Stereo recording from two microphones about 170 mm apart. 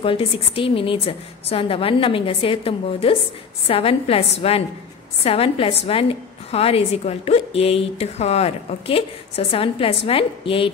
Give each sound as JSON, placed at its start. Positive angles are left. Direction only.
{"t": 0.0, "sound": "a woman's voice", "side_deg": 30}